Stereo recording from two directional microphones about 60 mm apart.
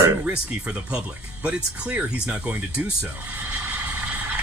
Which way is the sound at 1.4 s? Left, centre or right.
Right.